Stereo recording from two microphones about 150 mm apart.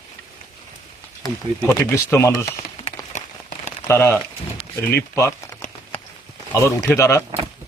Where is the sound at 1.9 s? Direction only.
15° left (ahead or behind).